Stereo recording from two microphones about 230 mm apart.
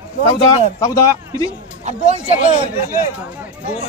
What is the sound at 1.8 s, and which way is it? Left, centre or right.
Speech, right.